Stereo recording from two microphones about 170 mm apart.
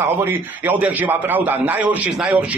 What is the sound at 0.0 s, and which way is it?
A man's voice, 15° right (ahead or behind).